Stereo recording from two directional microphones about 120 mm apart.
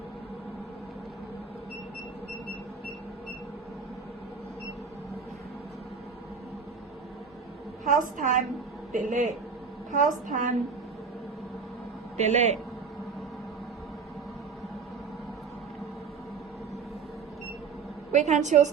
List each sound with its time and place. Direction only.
7.9 s a woman's voice: 90° right
12.2 s a woman's voice: 70° right (ahead or behind)
18.1 s a woman's voice: 75° right (ahead or behind)